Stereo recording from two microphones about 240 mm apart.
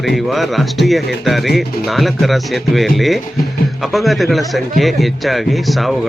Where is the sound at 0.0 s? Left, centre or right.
Centre.